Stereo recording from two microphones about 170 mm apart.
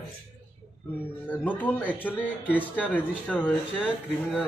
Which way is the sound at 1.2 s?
10° left (ahead or behind).